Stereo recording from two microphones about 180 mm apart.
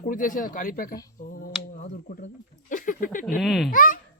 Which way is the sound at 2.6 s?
50° left (ahead or behind).